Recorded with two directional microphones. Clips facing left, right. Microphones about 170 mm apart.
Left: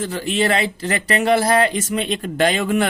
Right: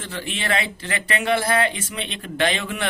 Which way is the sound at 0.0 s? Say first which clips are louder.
Left 9 dB; 40° left (ahead or behind).